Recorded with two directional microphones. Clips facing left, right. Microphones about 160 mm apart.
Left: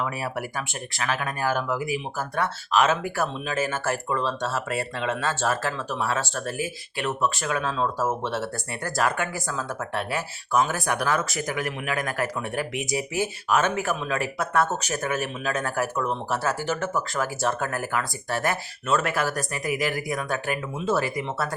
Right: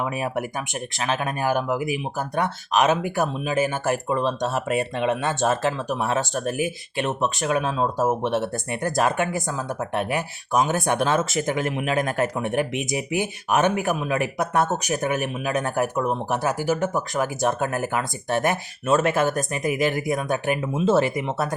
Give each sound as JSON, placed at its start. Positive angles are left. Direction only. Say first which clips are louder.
{"t": 0.0, "sound": "speech", "louder": "right 3 dB", "side_deg": -20}